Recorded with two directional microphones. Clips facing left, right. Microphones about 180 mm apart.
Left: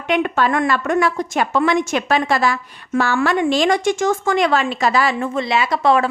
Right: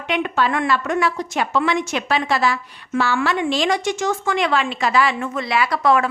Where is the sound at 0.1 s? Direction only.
50° left (ahead or behind).